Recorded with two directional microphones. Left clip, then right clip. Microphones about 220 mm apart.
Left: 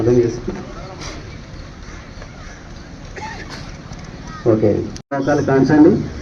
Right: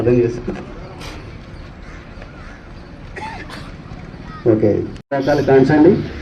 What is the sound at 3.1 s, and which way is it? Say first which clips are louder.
Boat: right 1 dB; 55° right (ahead or behind).